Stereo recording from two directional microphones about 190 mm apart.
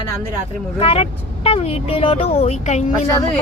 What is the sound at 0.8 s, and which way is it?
Speech, 30° left (ahead or behind).